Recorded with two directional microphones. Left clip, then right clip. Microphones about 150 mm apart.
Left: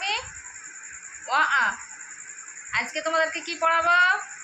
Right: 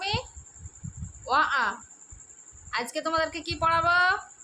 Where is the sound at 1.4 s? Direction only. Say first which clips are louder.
Left 3 dB; 90° right.